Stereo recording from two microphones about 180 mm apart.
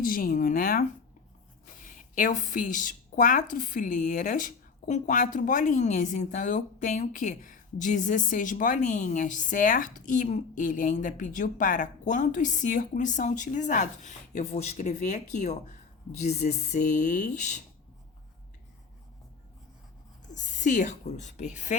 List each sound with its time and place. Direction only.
0.0 s a woman's voice: 50° left (ahead or behind)
1.9 s a woman's voice: 45° left (ahead or behind)
20.3 s a woman's voice: 45° left (ahead or behind)